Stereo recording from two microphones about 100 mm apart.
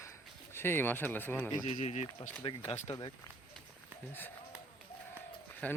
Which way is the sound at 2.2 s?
90° left.